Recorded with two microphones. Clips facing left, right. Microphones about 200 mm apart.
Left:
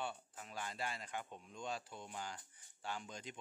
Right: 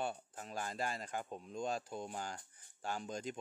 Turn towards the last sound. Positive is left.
turn(degrees=-45)  # may be behind; listen again after turning